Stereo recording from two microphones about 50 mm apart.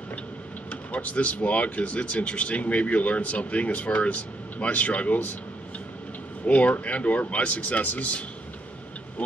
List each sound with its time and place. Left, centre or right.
0.7 s speech: left
6.4 s speech: left